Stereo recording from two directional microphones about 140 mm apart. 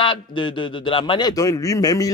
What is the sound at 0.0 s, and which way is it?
A man's voice, 35° left (ahead or behind).